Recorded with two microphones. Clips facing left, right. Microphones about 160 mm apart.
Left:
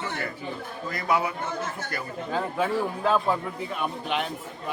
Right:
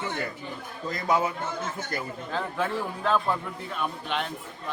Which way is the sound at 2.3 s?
5° left (ahead or behind).